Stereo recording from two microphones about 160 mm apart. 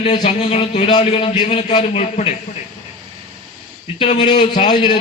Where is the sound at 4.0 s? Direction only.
30° left (ahead or behind).